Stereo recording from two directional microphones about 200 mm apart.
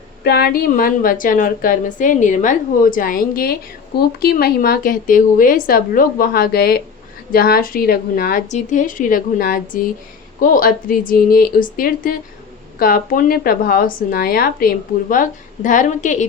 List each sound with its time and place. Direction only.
0.3 s a woman's voice: 50° left (ahead or behind)